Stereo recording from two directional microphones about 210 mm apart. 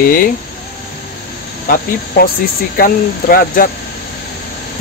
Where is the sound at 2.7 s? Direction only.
45° left (ahead or behind).